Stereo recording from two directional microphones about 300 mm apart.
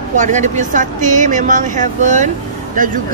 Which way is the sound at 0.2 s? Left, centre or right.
Right.